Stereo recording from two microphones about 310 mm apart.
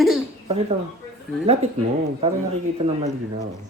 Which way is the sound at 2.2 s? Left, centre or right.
Centre.